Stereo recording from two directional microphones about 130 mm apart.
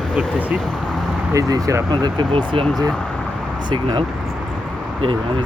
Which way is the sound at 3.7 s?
35° right (ahead or behind).